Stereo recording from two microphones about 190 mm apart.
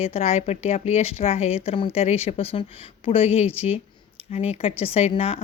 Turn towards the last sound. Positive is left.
turn(degrees=30)  # may be behind; listen again after turning